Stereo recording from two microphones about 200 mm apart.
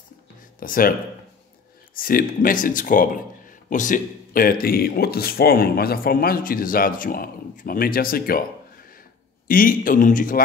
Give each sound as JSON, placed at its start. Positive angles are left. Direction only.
{"t": 0.6, "sound": "speech", "side_deg": 45}
{"t": 2.0, "sound": "speech", "side_deg": 45}